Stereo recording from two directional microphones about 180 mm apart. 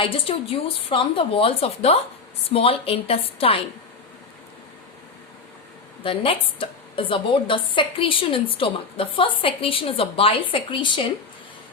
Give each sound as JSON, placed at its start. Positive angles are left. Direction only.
{"t": 0.0, "sound": "a woman's voice", "side_deg": 30}
{"t": 6.0, "sound": "a woman's voice", "side_deg": 30}